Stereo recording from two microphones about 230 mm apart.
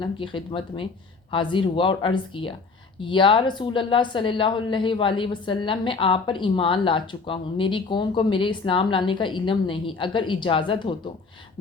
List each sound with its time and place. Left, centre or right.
0.0 s a woman's voice: left